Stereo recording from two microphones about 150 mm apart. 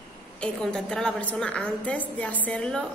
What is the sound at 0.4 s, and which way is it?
A woman's voice, 5° left (ahead or behind).